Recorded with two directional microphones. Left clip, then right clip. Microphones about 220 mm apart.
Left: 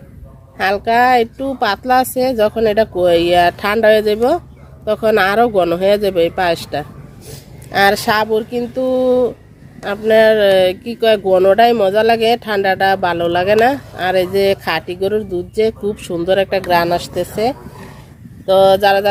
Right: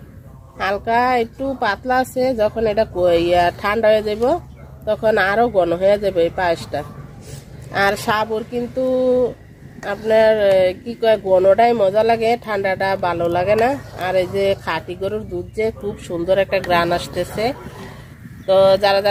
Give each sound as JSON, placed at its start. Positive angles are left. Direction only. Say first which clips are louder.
{"t": 0.5, "sound": "speech", "louder": "left 4 dB", "side_deg": 40}